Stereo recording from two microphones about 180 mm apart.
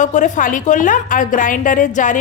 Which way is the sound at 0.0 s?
45° left (ahead or behind).